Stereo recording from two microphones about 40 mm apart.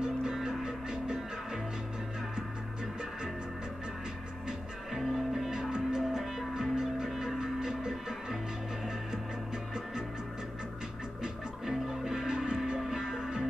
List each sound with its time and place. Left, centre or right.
0.0 s music: centre
4.5 s music: centre
5.5 s music: right
11.2 s music: centre